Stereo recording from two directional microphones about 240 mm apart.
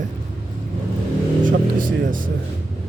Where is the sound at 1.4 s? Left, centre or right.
Right.